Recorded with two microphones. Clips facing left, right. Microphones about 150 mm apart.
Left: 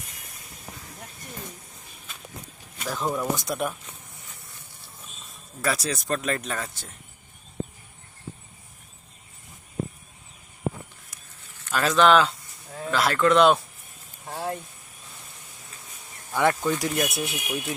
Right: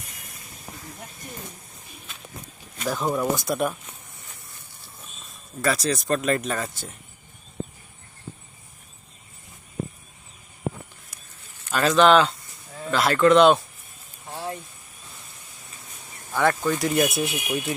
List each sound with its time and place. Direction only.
2.8 s speech: 5° right (ahead or behind)
5.6 s speech: 5° left (ahead or behind)
11.7 s speech: centre (ahead or behind)
16.3 s speech: 20° left (ahead or behind)
16.7 s speech: 5° right (ahead or behind)